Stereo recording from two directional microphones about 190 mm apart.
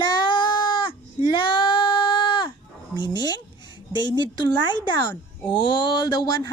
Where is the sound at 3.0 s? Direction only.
25° left (ahead or behind).